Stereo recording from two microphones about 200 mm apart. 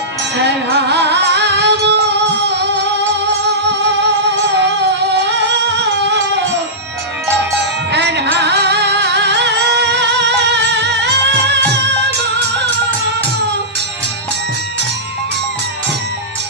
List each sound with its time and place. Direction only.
0.3 s music: 55° right (ahead or behind)
7.9 s music: 60° right (ahead or behind)